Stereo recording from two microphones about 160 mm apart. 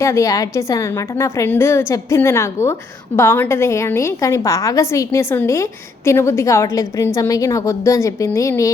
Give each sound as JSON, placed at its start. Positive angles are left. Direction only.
{"t": 0.0, "sound": "a woman's voice", "side_deg": 20}